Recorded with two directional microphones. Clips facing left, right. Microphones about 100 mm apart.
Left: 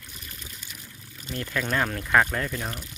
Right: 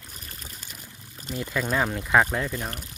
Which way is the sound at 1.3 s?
10° right (ahead or behind).